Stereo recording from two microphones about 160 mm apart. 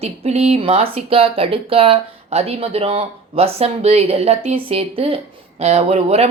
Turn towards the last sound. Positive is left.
turn(degrees=-40)  # may be behind; listen again after turning